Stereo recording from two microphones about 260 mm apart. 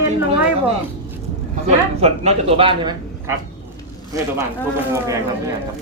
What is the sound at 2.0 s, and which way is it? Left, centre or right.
A man's voice, right.